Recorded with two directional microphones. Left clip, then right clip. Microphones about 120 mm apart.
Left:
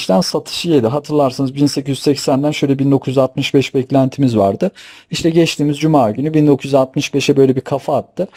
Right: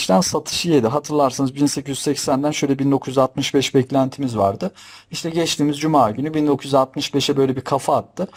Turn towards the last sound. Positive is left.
turn(degrees=5)  # may be behind; listen again after turning